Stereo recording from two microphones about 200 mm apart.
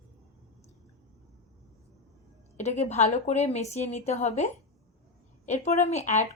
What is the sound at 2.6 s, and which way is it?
A woman's voice, 35° left (ahead or behind).